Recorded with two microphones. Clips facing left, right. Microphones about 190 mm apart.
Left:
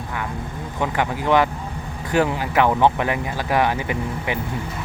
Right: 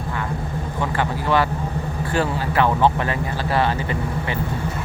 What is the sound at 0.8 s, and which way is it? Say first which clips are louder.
Speech: left 2 dB; 15° left (ahead or behind).